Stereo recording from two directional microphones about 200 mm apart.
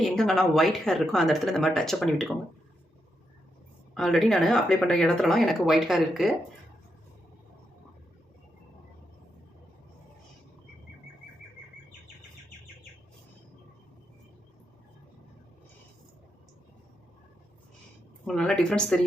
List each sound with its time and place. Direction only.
0.0 s speech: centre (ahead or behind)
3.9 s speech: centre (ahead or behind)
18.3 s speech: centre (ahead or behind)